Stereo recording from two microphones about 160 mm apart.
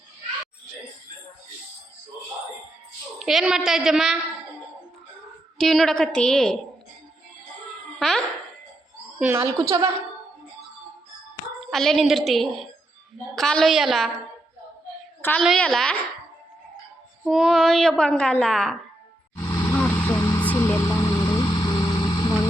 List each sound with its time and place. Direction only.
3.2 s a woman's voice: centre (ahead or behind)
5.5 s a woman's voice: centre (ahead or behind)
7.9 s wail: centre (ahead or behind)
9.1 s a woman's voice: 15° right (ahead or behind)
11.6 s a woman's voice: centre (ahead or behind)
15.2 s a woman's voice: 10° left (ahead or behind)
17.2 s a woman's voice: centre (ahead or behind)
19.4 s vehicle: 20° left (ahead or behind)
19.7 s vehicle: 10° left (ahead or behind)
20.1 s vehicle: 25° left (ahead or behind)
20.4 s vehicle: 10° left (ahead or behind)